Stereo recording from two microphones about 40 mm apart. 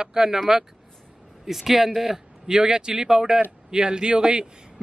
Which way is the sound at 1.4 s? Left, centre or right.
Centre.